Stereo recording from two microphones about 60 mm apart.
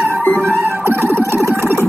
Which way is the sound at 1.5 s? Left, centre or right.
Right.